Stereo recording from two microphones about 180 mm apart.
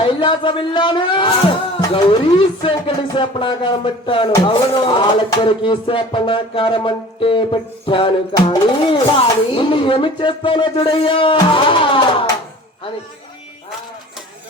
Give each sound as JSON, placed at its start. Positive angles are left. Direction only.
{"t": 0.0, "sound": "music", "side_deg": 25}